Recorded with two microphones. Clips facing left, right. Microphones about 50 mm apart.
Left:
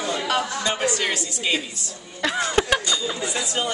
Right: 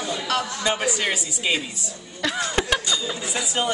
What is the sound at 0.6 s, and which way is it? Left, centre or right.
A woman's voice, centre.